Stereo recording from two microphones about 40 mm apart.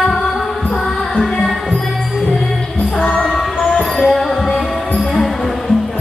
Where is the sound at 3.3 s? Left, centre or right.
Centre.